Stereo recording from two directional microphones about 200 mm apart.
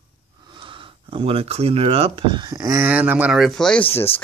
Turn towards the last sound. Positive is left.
turn(degrees=30)  # may be behind; listen again after turning